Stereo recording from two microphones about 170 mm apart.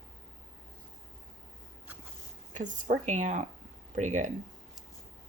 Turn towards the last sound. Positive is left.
turn(degrees=-45)  # may be behind; listen again after turning